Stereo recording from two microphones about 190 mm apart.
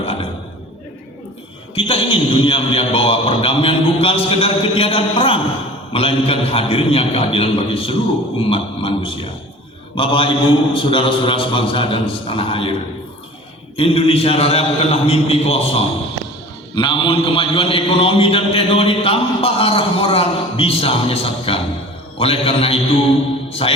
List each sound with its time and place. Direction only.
0.0 s a sound: 30° left (ahead or behind)
1.7 s a man's voice: 30° left (ahead or behind)
13.7 s a man's voice: 30° left (ahead or behind)